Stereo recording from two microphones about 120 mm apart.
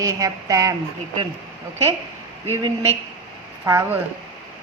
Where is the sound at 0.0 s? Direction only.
30° right (ahead or behind).